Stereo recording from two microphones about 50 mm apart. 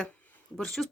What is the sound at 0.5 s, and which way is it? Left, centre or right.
Speech, centre.